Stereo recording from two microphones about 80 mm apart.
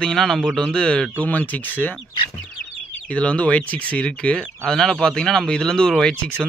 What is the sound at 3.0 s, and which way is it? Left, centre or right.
Speech, centre.